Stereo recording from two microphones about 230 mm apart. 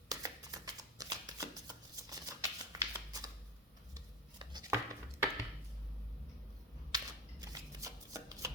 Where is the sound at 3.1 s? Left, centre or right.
Centre.